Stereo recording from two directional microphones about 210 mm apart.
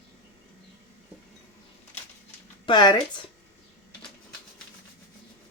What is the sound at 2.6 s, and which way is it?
Speech, 20° left (ahead or behind).